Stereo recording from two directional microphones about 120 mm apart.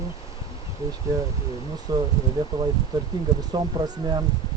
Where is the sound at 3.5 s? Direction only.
35° right (ahead or behind).